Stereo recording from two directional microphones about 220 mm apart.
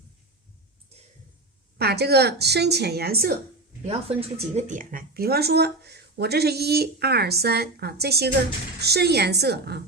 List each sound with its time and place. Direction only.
1.8 s a woman's voice: 45° right (ahead or behind)
3.8 s a woman's voice: 25° right (ahead or behind); by 9.8 s 50° right (ahead or behind)